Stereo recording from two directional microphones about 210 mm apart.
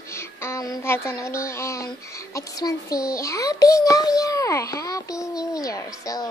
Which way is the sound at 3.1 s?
15° left (ahead or behind).